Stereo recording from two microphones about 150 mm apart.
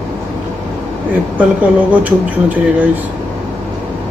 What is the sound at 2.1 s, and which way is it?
Speech, 10° right (ahead or behind).